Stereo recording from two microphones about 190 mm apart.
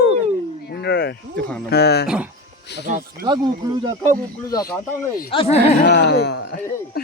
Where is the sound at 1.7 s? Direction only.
60° left (ahead or behind).